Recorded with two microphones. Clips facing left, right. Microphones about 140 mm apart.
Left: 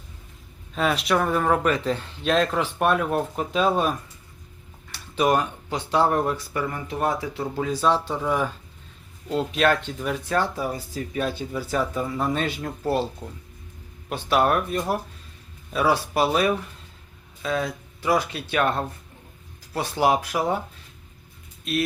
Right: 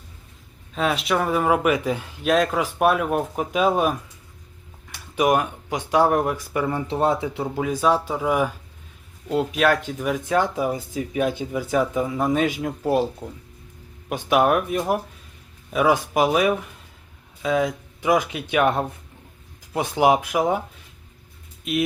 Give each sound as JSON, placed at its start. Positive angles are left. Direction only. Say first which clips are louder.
{"t": 0.7, "sound": "speech", "louder": "even", "side_deg": 0}
{"t": 6.7, "sound": "speech", "louder": "right 5 dB", "side_deg": -30}